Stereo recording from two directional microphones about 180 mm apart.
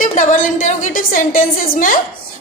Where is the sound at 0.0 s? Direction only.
45° left (ahead or behind).